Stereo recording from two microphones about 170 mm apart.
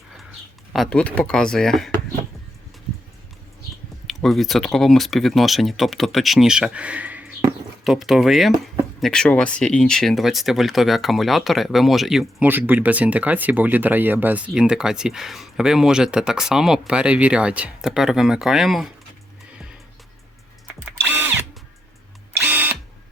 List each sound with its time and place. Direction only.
0.7 s speech: centre (ahead or behind)
4.0 s speech: centre (ahead or behind)
20.7 s drill: 10° right (ahead or behind)
22.3 s camera: 10° right (ahead or behind)